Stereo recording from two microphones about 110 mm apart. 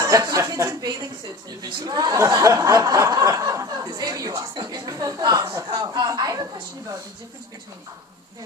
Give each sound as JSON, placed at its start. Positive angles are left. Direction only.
{"t": 0.0, "sound": "speech", "side_deg": -35}